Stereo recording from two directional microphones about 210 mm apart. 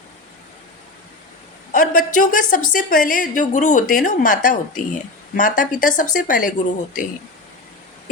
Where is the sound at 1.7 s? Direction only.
40° left (ahead or behind).